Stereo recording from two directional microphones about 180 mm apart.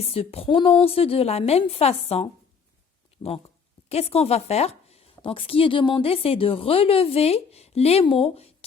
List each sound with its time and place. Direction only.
0.0 s a woman's voice: 35° left (ahead or behind)